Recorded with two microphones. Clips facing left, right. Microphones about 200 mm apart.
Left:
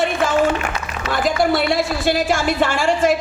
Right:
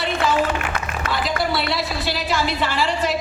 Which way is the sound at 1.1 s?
50° left (ahead or behind).